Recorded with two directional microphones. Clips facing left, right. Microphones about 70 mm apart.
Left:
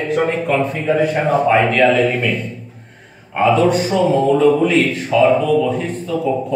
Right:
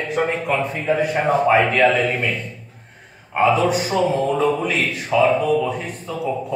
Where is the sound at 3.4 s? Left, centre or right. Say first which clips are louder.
Left 3 dB; centre.